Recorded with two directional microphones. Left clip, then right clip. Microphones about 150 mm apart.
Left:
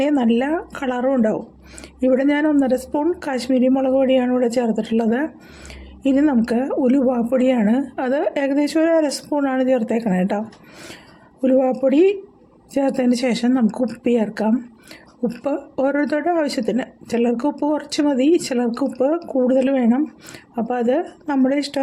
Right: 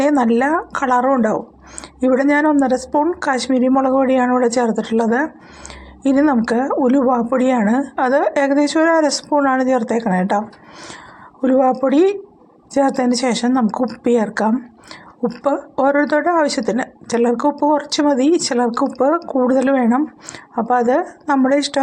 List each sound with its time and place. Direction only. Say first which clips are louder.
0.0 s a woman's voice: right 4 dB; 10° left (ahead or behind)
11.4 s a woman's voice: right 2 dB; 15° left (ahead or behind)